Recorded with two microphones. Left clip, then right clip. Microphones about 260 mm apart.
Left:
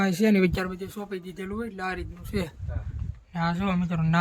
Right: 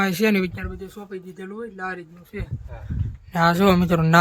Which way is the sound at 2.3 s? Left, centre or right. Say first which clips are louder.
Left 4 dB; centre.